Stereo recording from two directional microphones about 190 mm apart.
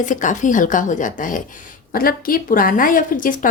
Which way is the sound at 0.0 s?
40° left (ahead or behind).